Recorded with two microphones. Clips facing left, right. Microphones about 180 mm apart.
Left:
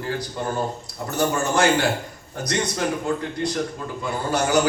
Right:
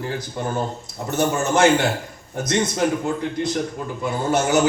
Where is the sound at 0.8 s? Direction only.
20° right (ahead or behind).